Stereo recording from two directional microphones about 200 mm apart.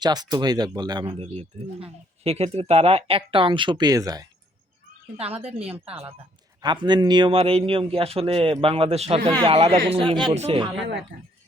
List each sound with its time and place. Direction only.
0.0 s speech: 20° right (ahead or behind)
5.8 s speech: 30° right (ahead or behind)
10.8 s speech: 60° right (ahead or behind)